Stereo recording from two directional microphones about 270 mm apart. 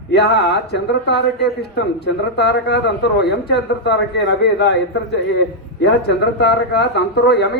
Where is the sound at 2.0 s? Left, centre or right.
Left.